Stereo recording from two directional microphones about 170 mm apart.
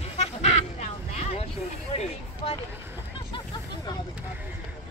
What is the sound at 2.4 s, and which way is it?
Vehicle, 35° left (ahead or behind).